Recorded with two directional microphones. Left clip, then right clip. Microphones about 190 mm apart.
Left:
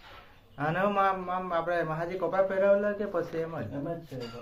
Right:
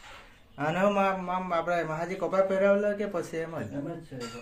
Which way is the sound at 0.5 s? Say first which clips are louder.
Right 1 dB; 15° right (ahead or behind).